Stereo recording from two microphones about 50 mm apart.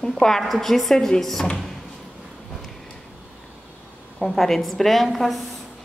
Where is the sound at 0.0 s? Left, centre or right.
Centre.